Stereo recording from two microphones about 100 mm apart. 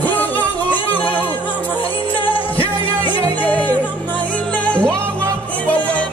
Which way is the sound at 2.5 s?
65° left (ahead or behind).